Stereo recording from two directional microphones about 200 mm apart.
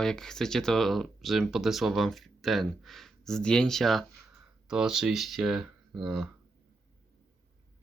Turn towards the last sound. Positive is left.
turn(degrees=0)  # may be behind; listen again after turning